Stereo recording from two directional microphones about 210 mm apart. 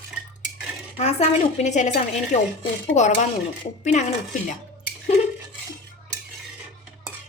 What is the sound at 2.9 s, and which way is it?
A woman's voice, 35° left (ahead or behind).